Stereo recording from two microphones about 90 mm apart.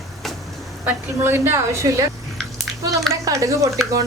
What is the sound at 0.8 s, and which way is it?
A woman's voice, 25° right (ahead or behind).